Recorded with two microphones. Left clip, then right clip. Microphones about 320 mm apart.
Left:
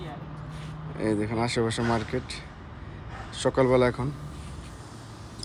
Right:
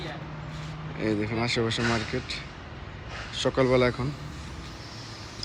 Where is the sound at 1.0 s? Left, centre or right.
Centre.